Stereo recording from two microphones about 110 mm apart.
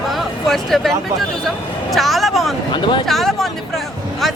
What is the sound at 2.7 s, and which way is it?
Speech, 50° left (ahead or behind).